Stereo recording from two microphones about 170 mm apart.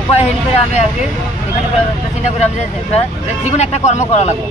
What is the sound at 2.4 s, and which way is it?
Speech, 40° left (ahead or behind).